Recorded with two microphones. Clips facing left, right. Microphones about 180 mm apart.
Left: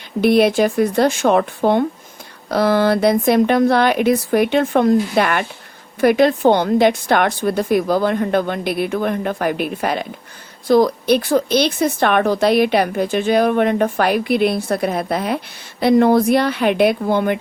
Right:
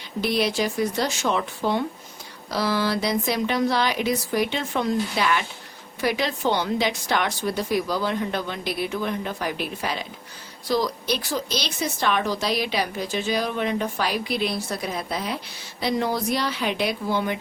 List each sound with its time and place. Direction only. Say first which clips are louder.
0.2 s a woman's voice: left 10 dB; 55° left (ahead or behind)